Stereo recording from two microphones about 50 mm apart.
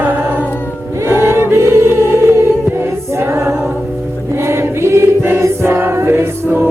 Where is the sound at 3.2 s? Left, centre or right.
Right.